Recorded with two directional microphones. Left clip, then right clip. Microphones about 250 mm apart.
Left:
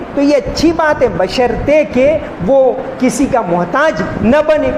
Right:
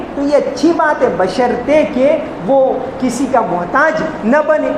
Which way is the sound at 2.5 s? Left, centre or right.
Left.